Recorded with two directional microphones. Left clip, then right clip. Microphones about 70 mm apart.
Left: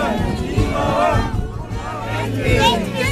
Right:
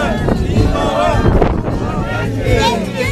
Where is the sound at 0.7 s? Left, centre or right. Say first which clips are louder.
Right 2 dB; right.